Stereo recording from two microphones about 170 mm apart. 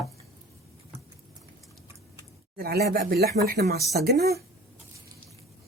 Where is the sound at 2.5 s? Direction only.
70° right (ahead or behind).